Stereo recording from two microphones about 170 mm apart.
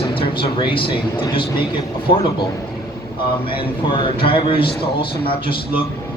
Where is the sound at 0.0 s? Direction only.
30° left (ahead or behind).